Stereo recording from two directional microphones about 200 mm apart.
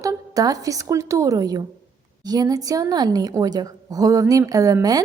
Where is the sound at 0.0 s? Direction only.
15° right (ahead or behind).